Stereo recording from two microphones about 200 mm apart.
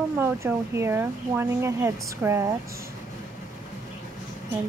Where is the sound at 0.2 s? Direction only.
10° right (ahead or behind).